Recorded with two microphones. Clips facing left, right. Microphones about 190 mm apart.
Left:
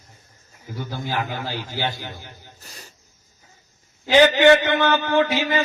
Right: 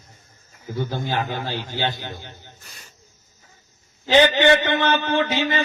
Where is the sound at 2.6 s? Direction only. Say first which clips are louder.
Left 4 dB; 35° left (ahead or behind).